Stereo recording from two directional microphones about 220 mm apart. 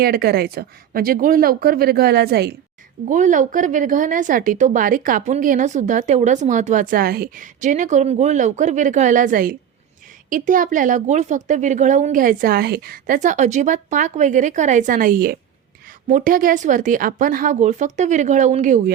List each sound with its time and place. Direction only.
0.0 s speech: 45° right (ahead or behind)
3.1 s a woman's voice: 35° right (ahead or behind)